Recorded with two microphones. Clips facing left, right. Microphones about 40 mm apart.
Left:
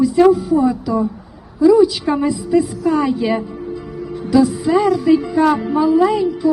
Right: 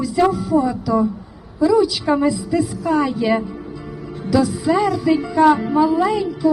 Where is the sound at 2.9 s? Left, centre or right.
Centre.